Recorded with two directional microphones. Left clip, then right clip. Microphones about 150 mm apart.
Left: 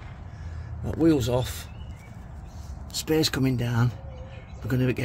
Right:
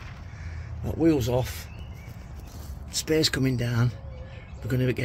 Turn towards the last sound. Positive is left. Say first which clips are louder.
# left 1 dB
turn(degrees=10)  # may be behind; listen again after turning